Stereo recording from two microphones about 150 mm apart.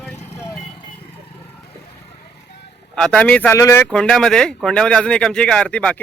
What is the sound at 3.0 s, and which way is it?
Speech, 5° left (ahead or behind).